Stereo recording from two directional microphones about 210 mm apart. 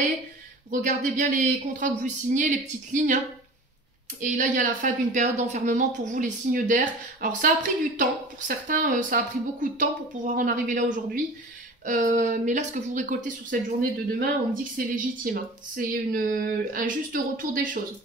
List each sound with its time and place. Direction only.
0.7 s speech: 35° right (ahead or behind)
4.2 s speech: 35° right (ahead or behind)